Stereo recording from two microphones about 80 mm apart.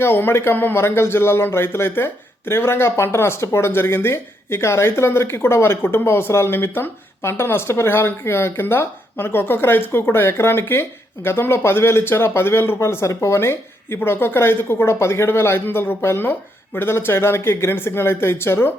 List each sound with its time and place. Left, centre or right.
0.0 s speech: left